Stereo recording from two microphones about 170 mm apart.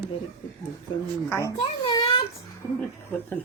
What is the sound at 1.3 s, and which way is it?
Speech, 15° left (ahead or behind).